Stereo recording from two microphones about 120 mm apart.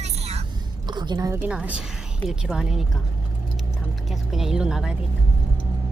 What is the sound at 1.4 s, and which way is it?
A woman's voice, 10° right (ahead or behind).